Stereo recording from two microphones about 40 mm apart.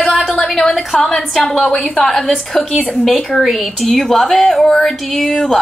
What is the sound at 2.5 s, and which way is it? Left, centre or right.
Speech, left.